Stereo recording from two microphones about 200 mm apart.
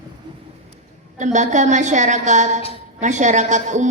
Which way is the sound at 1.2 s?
35° right (ahead or behind).